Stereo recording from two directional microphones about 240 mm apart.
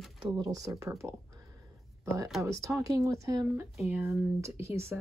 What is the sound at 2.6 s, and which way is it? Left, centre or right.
Speech, centre.